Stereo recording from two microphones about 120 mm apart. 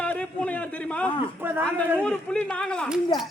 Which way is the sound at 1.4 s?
20° right (ahead or behind).